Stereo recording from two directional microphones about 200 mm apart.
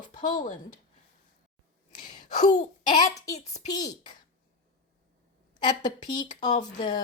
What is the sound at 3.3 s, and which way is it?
Speech, 35° left (ahead or behind).